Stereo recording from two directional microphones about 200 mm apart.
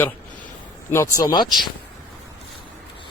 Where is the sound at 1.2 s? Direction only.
20° left (ahead or behind).